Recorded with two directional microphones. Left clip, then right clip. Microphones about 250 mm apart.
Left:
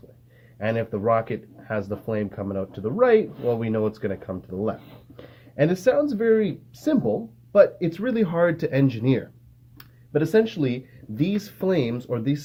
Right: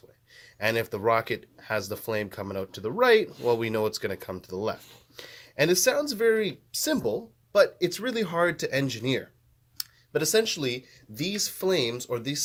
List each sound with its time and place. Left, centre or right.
0.6 s speech: right